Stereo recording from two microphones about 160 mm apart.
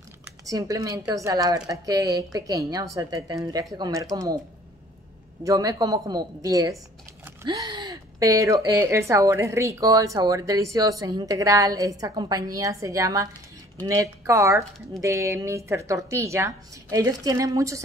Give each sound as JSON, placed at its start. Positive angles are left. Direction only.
{"t": 0.5, "sound": "a woman's voice", "side_deg": -20}
{"t": 5.4, "sound": "a woman's voice", "side_deg": -20}